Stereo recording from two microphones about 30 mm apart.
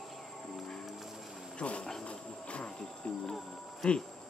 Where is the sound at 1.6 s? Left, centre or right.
Left.